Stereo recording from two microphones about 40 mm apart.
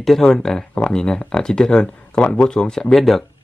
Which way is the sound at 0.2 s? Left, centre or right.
Centre.